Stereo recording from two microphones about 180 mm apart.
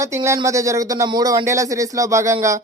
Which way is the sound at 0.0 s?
15° right (ahead or behind).